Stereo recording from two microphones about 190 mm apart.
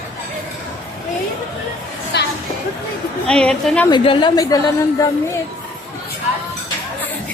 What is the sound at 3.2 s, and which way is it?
Speech, 5° left (ahead or behind).